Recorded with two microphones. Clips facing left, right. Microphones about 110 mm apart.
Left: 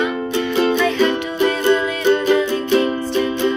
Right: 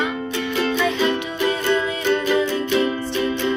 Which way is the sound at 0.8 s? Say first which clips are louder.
Left 4 dB; 20° right (ahead or behind).